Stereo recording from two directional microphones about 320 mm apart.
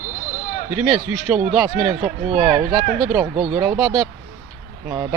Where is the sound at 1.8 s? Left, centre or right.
Right.